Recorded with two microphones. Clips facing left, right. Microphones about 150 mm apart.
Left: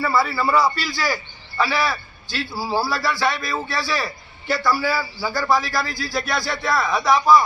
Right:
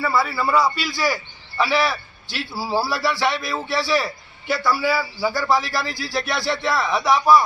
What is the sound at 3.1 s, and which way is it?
A man's voice, 20° right (ahead or behind).